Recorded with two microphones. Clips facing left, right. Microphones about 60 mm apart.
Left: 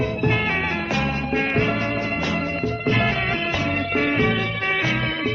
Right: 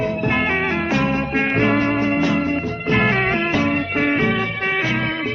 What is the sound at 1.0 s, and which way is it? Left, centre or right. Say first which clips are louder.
Music: right 3 dB; right.